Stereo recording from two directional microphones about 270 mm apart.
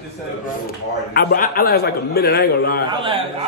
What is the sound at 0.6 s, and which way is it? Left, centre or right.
A man's voice, left.